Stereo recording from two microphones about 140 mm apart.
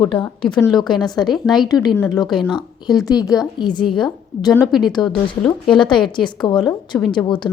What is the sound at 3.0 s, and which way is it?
A woman's voice, 25° left (ahead or behind).